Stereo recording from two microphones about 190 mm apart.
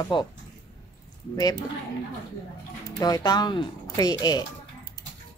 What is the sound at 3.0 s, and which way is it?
A woman's voice, 20° left (ahead or behind).